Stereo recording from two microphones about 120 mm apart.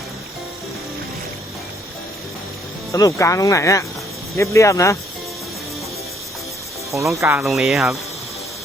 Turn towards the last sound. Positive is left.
turn(degrees=0)  # may be behind; listen again after turning